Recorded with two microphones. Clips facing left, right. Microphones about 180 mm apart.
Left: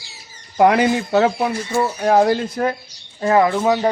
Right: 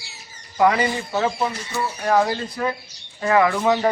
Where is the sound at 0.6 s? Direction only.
65° left (ahead or behind); by 2.7 s 50° left (ahead or behind).